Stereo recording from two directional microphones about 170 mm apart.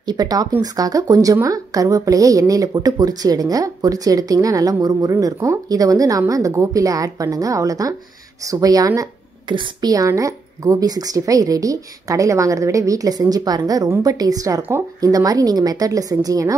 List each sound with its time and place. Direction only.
0.0 s speech: 25° right (ahead or behind)